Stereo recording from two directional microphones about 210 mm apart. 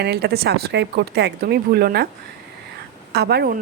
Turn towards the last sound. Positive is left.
turn(degrees=-45)  # may be behind; listen again after turning